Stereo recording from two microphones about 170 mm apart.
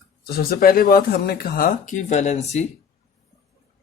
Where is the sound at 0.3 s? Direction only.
60° left (ahead or behind); by 2.6 s 40° left (ahead or behind).